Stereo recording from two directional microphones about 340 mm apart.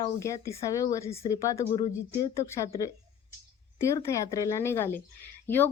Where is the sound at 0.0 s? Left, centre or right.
Centre.